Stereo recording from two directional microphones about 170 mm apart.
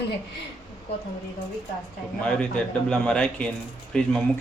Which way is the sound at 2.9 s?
5° left (ahead or behind).